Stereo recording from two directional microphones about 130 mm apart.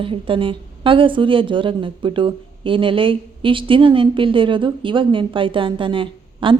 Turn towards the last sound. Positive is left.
turn(degrees=-40)  # may be behind; listen again after turning